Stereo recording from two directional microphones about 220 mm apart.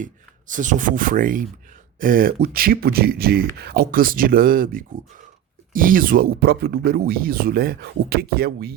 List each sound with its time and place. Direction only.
0.0 s speech: 35° right (ahead or behind)